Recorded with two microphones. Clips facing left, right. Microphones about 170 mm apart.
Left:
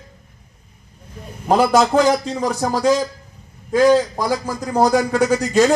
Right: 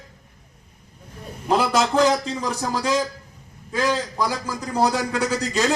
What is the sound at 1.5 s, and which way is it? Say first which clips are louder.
A man's voice: left 5 dB; 50° left (ahead or behind).